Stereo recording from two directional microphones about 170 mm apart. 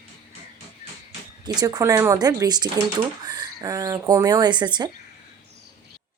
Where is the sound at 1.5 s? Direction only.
20° right (ahead or behind).